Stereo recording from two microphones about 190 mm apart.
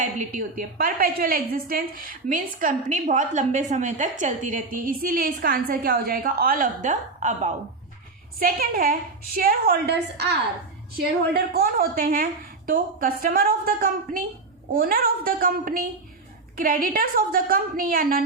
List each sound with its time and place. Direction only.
0.0 s a woman's voice: 40° right (ahead or behind)